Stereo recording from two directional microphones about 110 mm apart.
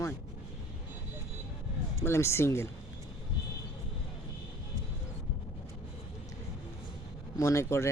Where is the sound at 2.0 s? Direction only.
25° left (ahead or behind).